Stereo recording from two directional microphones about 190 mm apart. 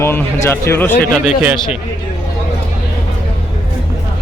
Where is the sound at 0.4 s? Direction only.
15° left (ahead or behind).